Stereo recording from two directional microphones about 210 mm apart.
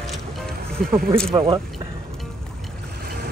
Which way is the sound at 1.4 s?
15° right (ahead or behind).